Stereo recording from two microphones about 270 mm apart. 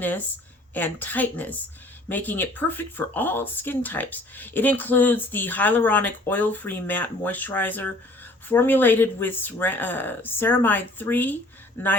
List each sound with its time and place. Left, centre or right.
0.7 s speech: centre